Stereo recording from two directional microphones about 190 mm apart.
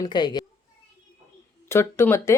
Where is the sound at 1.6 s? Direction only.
15° left (ahead or behind).